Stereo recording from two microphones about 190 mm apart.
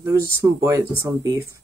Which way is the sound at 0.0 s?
15° right (ahead or behind).